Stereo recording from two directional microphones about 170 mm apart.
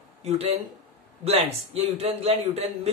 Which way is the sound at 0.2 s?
35° right (ahead or behind).